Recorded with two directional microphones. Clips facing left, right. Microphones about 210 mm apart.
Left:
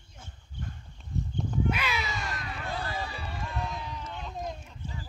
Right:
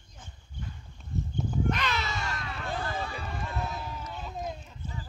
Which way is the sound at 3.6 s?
5° right (ahead or behind).